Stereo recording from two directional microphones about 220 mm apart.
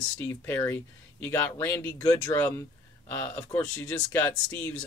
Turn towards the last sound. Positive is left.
turn(degrees=10)  # may be behind; listen again after turning